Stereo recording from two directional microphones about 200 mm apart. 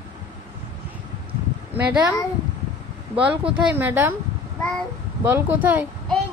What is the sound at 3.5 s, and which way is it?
Speech, 10° right (ahead or behind).